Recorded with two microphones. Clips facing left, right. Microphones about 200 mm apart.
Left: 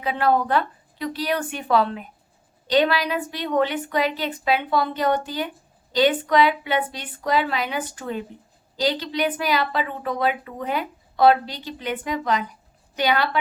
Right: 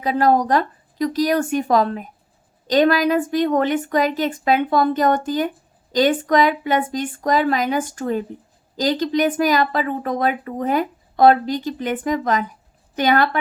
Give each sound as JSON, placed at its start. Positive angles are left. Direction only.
{"t": 0.0, "sound": "a woman's voice", "side_deg": -40}